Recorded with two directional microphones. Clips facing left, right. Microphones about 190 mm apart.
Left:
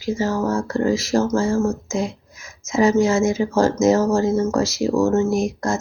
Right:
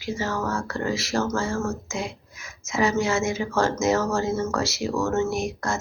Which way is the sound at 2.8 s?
40° left (ahead or behind).